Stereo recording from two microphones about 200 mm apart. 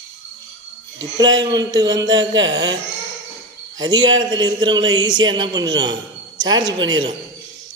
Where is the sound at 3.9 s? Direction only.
70° right (ahead or behind).